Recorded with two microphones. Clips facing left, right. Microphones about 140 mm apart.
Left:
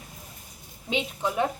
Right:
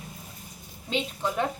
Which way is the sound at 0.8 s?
10° left (ahead or behind).